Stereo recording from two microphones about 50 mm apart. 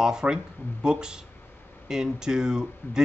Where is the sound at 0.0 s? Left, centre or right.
Centre.